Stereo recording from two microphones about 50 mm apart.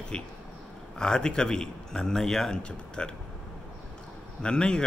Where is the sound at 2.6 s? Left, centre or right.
Centre.